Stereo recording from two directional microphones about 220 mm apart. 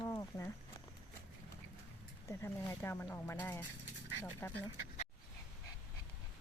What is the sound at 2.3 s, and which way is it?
Speech, 10° left (ahead or behind).